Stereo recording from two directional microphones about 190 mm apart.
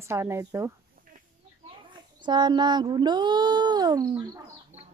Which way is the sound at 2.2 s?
25° right (ahead or behind).